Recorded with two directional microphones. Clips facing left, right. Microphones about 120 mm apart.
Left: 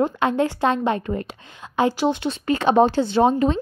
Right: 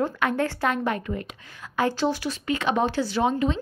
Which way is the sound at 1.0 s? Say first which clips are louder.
Left 5 dB; 40° left (ahead or behind).